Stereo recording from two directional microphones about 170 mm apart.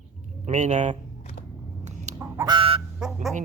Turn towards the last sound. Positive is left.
turn(degrees=-5)  # may be behind; listen again after turning